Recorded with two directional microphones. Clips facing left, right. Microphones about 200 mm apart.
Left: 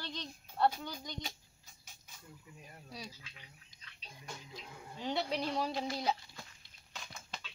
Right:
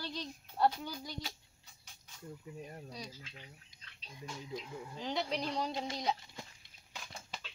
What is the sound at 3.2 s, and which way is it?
Speech, 40° right (ahead or behind).